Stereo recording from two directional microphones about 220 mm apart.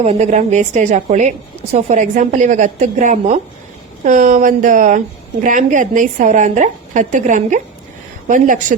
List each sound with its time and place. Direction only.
0.0 s a woman's voice: 30° right (ahead or behind)